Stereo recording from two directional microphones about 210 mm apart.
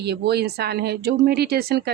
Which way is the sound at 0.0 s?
50° right (ahead or behind).